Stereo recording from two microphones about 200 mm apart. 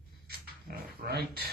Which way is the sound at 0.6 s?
50° right (ahead or behind).